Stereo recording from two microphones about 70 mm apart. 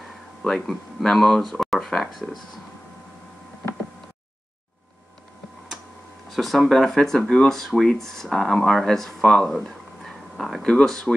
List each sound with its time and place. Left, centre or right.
0.4 s speech: centre
6.3 s speech: centre